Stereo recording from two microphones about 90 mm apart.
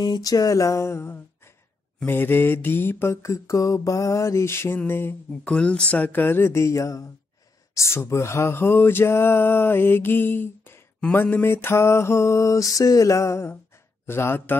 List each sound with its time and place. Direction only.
0.0 s mantra: 45° left (ahead or behind); by 1.2 s 30° left (ahead or behind)
2.0 s speech: 25° left (ahead or behind)
5.4 s speech: 10° left (ahead or behind)
11.1 s mantra: 20° left (ahead or behind)
14.0 s speech: 25° left (ahead or behind)